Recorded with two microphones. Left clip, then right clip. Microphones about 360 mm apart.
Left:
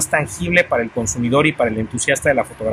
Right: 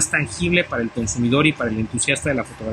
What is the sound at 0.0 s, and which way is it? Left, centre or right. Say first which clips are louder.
Speech: left 2 dB; centre.